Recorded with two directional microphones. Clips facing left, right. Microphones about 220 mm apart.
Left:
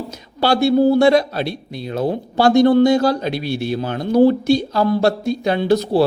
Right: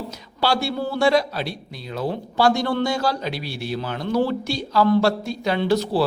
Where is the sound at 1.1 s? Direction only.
50° left (ahead or behind).